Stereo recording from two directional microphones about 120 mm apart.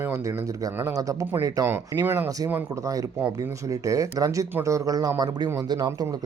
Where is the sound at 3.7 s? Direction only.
30° right (ahead or behind).